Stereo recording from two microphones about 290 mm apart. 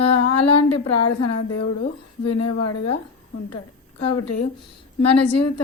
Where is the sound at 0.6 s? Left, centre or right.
Left.